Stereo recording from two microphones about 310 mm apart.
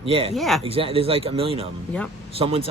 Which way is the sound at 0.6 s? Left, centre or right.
Centre.